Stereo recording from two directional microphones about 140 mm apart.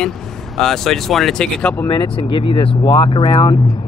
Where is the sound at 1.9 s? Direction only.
35° left (ahead or behind).